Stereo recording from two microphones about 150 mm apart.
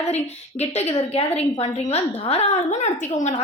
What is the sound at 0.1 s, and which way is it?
Speech, 45° left (ahead or behind).